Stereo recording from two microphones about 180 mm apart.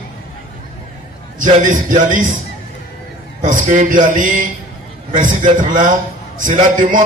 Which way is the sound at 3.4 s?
45° right (ahead or behind).